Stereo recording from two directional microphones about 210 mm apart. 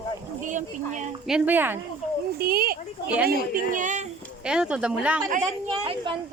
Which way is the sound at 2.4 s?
45° right (ahead or behind).